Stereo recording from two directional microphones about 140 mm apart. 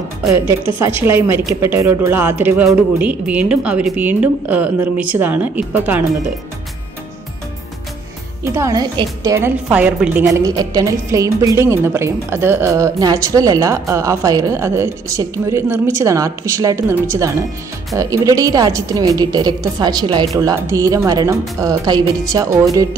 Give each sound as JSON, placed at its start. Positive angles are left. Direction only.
{"t": 0.3, "sound": "a woman's voice", "side_deg": -20}
{"t": 8.5, "sound": "a woman's voice", "side_deg": -25}
{"t": 9.7, "sound": "a woman's voice", "side_deg": -10}
{"t": 10.3, "sound": "a woman's voice", "side_deg": -25}